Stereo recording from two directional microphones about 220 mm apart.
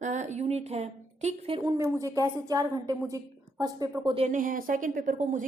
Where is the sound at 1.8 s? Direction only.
15° right (ahead or behind).